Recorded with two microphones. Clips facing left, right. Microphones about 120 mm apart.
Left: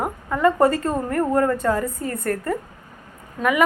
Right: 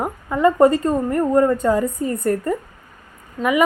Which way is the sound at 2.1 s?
20° right (ahead or behind).